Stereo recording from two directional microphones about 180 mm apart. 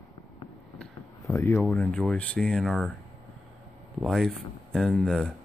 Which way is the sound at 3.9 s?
Centre (ahead or behind).